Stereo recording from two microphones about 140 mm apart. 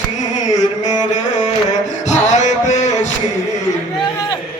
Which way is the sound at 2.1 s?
60° left (ahead or behind).